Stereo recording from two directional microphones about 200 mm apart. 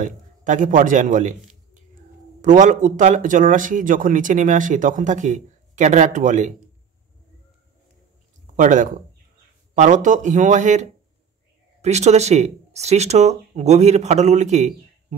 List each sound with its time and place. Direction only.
0.0 s a man's voice: 40° right (ahead or behind)
8.5 s speech: 40° right (ahead or behind)